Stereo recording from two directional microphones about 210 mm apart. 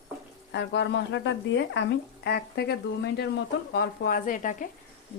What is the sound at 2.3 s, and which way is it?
Speech, 50° left (ahead or behind).